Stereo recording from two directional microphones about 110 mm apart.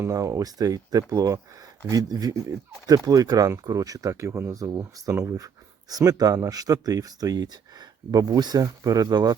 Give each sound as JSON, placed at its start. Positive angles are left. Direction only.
{"t": 0.0, "sound": "speech", "side_deg": -30}
{"t": 4.5, "sound": "speech", "side_deg": -30}